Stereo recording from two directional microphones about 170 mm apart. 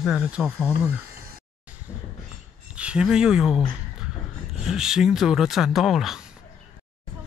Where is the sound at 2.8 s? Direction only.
5° right (ahead or behind).